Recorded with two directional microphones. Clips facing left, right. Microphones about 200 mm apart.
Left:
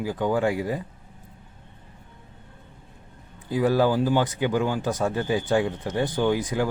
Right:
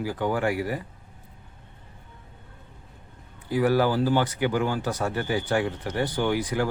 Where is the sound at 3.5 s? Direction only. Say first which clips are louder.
Left 1 dB; 20° left (ahead or behind).